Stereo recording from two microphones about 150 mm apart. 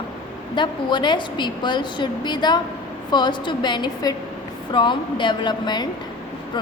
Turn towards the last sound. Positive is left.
turn(degrees=30)  # may be behind; listen again after turning